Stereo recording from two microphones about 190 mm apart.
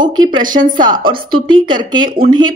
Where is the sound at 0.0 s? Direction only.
25° right (ahead or behind).